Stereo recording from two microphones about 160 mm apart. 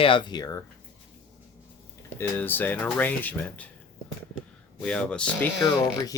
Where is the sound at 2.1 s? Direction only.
15° left (ahead or behind).